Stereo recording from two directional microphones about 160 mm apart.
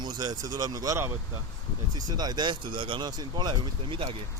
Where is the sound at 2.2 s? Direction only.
25° right (ahead or behind).